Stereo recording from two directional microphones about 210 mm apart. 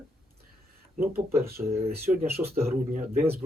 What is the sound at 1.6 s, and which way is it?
Speech, 20° right (ahead or behind).